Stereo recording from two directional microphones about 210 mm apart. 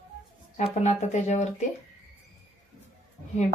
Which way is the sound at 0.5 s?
30° left (ahead or behind).